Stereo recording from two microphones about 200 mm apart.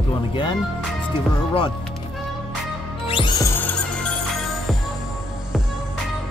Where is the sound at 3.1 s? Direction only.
25° left (ahead or behind).